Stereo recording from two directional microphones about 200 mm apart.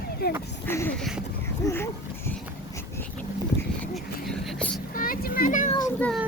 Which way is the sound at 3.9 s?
Centre (ahead or behind).